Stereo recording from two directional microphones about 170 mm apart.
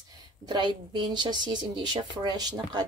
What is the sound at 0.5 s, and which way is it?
Speech, 25° right (ahead or behind).